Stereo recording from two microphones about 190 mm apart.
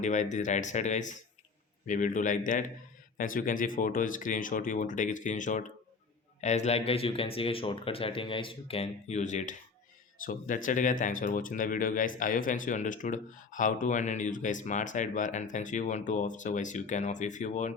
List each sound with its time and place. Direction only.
0.0 s speech: 40° left (ahead or behind)